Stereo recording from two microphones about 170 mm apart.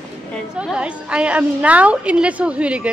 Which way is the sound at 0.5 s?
5° right (ahead or behind).